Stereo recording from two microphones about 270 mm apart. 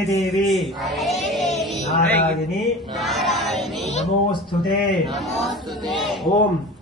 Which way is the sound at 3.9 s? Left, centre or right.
Left.